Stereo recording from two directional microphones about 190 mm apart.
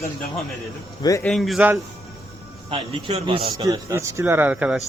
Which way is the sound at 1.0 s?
15° left (ahead or behind).